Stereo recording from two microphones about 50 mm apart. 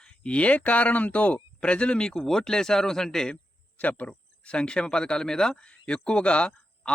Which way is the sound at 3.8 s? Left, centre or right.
Left.